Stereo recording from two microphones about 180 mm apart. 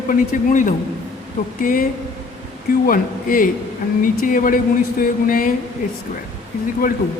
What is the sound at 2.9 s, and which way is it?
A man's voice, 50° left (ahead or behind).